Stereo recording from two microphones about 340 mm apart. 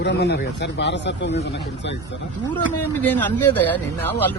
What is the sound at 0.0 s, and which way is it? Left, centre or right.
Speech, left.